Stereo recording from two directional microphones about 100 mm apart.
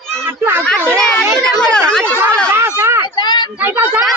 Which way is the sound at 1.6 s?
10° left (ahead or behind).